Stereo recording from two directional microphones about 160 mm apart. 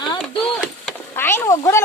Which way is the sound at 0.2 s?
Centre (ahead or behind).